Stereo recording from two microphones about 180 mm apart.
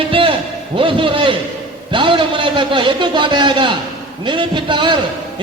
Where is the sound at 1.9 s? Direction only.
25° right (ahead or behind).